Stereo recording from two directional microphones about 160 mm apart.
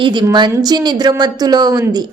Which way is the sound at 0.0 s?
30° right (ahead or behind).